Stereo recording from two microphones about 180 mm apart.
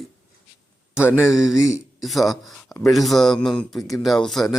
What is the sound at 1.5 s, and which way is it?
Speech, 15° left (ahead or behind).